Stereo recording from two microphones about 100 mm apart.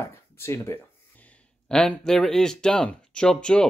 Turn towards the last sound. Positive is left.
turn(degrees=5)  # may be behind; listen again after turning